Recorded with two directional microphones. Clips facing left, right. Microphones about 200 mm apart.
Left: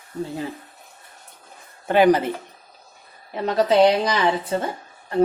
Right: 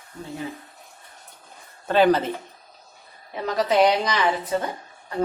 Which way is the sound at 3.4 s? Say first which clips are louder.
Left 3 dB; 30° left (ahead or behind).